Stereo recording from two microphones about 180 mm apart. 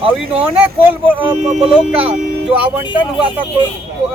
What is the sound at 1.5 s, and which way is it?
Speech, 30° right (ahead or behind).